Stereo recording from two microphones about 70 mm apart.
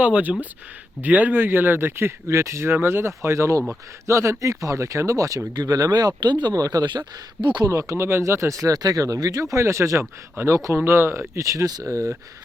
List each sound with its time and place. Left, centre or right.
0.0 s speech: right
3.2 s speech: right
6.5 s speech: right
7.7 s speech: right